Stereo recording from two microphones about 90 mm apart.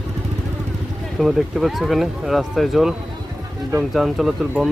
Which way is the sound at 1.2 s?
Centre (ahead or behind).